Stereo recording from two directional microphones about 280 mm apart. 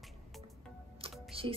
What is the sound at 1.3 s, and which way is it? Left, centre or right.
Music, centre.